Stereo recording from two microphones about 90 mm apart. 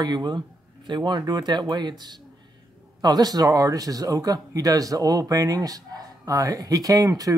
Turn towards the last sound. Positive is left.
turn(degrees=-40)  # may be behind; listen again after turning